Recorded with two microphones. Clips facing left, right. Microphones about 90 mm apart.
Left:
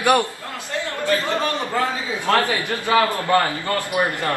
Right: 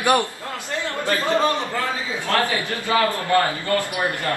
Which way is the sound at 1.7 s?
20° left (ahead or behind).